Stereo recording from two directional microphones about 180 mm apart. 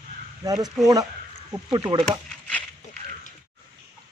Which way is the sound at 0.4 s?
20° right (ahead or behind).